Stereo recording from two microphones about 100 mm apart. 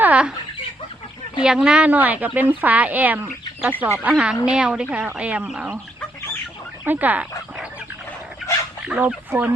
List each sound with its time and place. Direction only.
0.0 s a sound: 10° right (ahead or behind)
1.4 s speech: 10° right (ahead or behind)
6.8 s speech: 15° right (ahead or behind)
9.0 s speech: 20° right (ahead or behind)